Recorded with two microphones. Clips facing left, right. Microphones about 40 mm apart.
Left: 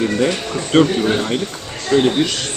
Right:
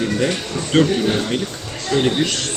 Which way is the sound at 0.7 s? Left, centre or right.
Centre.